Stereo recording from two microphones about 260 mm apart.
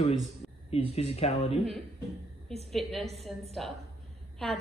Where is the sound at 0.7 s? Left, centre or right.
Left.